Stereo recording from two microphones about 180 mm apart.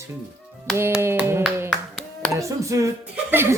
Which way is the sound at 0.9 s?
15° right (ahead or behind).